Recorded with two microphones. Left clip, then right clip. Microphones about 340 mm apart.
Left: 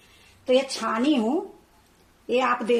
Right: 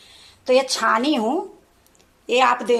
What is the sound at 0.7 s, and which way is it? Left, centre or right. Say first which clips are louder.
Speech: right 5 dB; right.